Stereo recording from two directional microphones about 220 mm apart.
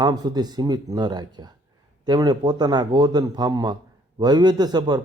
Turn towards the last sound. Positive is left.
turn(degrees=-20)  # may be behind; listen again after turning